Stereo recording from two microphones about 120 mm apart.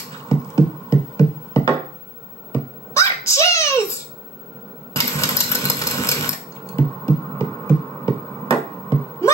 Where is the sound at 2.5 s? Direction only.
25° left (ahead or behind).